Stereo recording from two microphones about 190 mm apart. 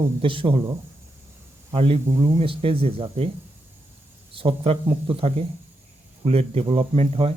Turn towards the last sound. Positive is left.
turn(degrees=-30)  # may be behind; listen again after turning